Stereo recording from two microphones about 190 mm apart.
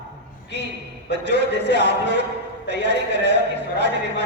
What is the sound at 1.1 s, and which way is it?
A man's voice, 65° right (ahead or behind).